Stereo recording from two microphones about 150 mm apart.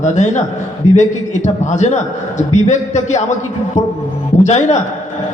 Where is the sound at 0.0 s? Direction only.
55° left (ahead or behind).